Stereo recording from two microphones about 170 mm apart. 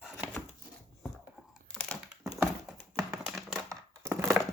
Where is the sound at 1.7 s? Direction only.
5° left (ahead or behind).